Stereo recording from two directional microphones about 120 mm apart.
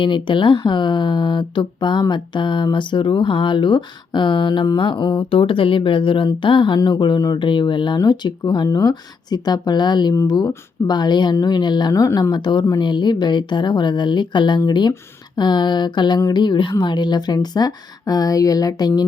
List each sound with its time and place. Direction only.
0.0 s speech: 45° left (ahead or behind)